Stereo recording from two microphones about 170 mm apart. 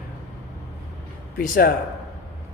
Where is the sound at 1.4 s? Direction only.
55° left (ahead or behind).